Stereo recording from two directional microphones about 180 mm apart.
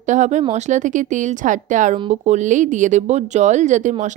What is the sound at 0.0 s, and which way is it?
A woman's voice, 40° right (ahead or behind).